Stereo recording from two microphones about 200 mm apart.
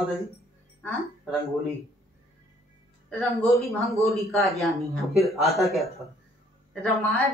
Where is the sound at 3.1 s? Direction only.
5° left (ahead or behind).